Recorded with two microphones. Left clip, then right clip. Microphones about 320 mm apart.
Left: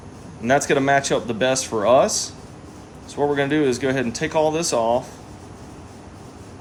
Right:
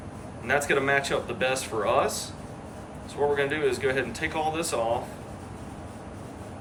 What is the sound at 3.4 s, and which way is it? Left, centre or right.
Speech, centre.